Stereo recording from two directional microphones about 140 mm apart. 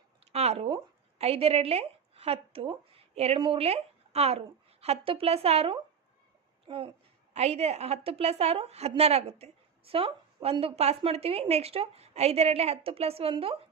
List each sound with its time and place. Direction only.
0.3 s a woman's voice: 50° right (ahead or behind)
7.3 s a woman's voice: 50° right (ahead or behind)